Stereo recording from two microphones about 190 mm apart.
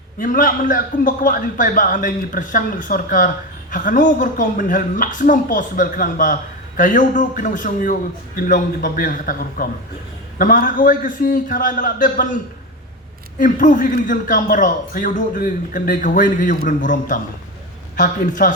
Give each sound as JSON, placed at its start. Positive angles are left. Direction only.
{"t": 0.2, "sound": "a man's voice", "side_deg": 45}
{"t": 13.4, "sound": "a man's voice", "side_deg": 45}